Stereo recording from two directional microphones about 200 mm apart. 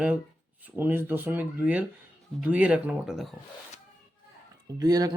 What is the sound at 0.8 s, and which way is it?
Speech, 10° right (ahead or behind).